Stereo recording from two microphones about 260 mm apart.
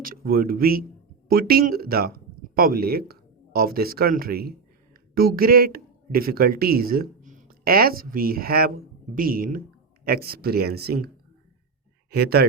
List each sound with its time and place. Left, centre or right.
0.0 s speech: right
12.1 s speech: right